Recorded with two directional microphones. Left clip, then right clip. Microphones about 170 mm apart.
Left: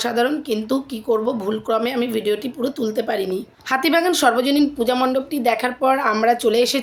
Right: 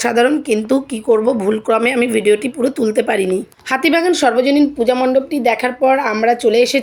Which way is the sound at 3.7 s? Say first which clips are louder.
Right 3 dB; 15° right (ahead or behind).